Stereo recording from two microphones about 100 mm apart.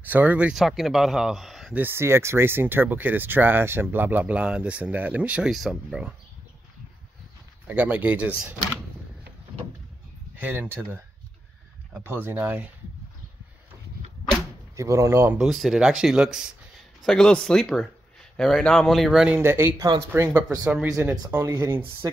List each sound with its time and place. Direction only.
0.0 s speech: 15° right (ahead or behind)
0.6 s speech: centre (ahead or behind)
1.7 s speech: 20° right (ahead or behind)
5.5 s speech: centre (ahead or behind)
7.6 s speech: 15° right (ahead or behind)
10.3 s speech: 20° right (ahead or behind)
14.8 s speech: 30° right (ahead or behind)
15.3 s speech: 5° right (ahead or behind)
19.2 s speech: 20° right (ahead or behind)
20.2 s speech: 15° right (ahead or behind)